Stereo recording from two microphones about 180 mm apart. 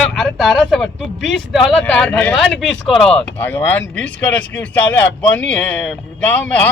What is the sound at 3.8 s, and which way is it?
Speech, 90° left.